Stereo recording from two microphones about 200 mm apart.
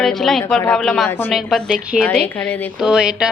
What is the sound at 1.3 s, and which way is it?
A woman's voice, centre (ahead or behind).